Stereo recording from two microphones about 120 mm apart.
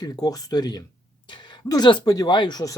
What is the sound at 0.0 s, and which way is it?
Speech, 30° left (ahead or behind).